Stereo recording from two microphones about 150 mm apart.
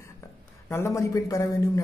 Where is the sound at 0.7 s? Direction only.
20° left (ahead or behind).